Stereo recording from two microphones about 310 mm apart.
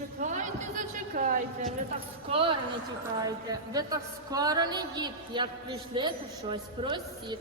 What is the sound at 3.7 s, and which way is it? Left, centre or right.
A woman's voice, centre.